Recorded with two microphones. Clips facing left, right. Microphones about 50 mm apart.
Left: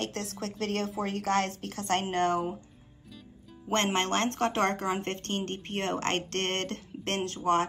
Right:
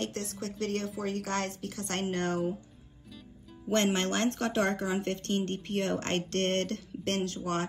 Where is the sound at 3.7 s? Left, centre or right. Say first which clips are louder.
Even; left.